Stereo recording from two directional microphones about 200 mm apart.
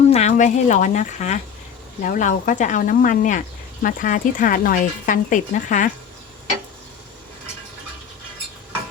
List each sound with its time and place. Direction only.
0.1 s speech: 35° left (ahead or behind)